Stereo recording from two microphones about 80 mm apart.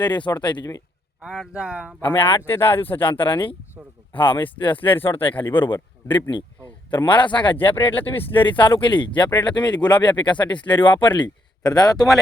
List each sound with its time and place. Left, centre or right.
0.0 s speech: left
1.2 s speech: centre
2.0 s speech: left
3.0 s speech: left
3.8 s speech: centre
4.1 s speech: left
4.9 s speech: left
5.5 s speech: left
7.9 s speech: left
8.3 s speech: left
11.6 s speech: left